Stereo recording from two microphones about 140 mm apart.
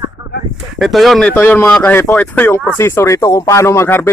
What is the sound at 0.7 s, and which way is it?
Speech, centre (ahead or behind).